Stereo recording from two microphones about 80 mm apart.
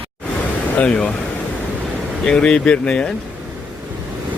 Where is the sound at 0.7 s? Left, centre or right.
Centre.